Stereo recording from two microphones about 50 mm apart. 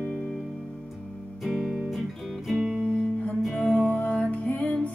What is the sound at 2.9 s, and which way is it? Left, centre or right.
Music, left.